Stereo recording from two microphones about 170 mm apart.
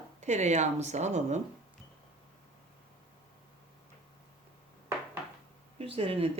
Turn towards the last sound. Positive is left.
turn(degrees=-35)  # may be behind; listen again after turning